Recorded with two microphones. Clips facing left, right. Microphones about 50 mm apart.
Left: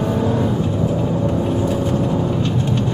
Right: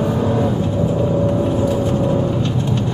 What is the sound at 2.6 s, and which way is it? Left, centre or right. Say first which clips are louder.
Vehicle: even; centre.